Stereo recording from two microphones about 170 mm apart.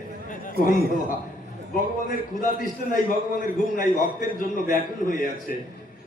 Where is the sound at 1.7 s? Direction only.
50° left (ahead or behind).